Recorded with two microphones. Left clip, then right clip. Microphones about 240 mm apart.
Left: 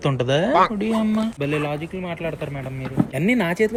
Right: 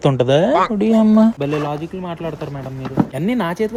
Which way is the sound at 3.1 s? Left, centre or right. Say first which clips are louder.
Even; centre.